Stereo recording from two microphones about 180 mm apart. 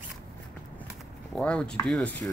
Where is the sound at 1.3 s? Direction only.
5° left (ahead or behind).